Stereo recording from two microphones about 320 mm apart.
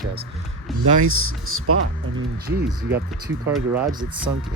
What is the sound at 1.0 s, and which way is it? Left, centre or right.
Speech, right.